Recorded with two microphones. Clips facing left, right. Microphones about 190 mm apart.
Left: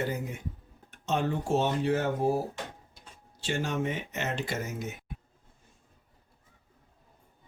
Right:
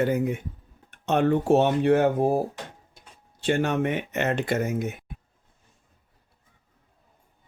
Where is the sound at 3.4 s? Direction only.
60° right (ahead or behind).